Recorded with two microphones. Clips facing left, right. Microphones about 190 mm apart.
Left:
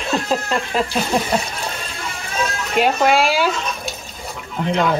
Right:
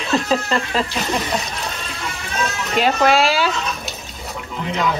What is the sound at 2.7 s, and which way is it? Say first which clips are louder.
Speech: even; centre (ahead or behind).